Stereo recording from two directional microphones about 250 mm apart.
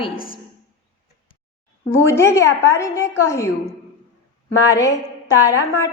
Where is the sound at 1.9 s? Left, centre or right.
Centre.